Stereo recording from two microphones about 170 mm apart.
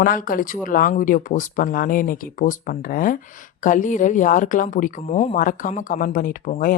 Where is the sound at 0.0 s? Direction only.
55° left (ahead or behind).